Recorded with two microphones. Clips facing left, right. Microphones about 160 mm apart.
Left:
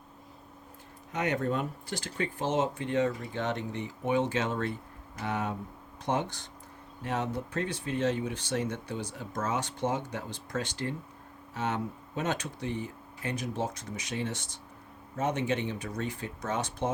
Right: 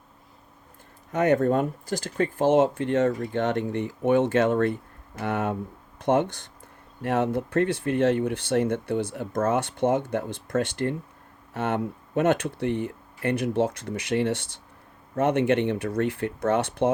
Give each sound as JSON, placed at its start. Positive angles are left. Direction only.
{"t": 1.1, "sound": "speech", "side_deg": -50}